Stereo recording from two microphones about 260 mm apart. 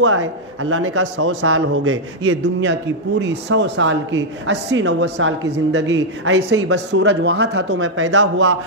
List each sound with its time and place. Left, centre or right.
0.0 s a man's voice: right